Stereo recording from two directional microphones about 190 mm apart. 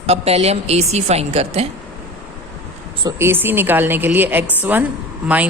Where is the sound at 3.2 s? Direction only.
10° right (ahead or behind).